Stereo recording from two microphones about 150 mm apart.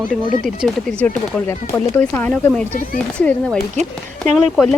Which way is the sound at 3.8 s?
50° right (ahead or behind).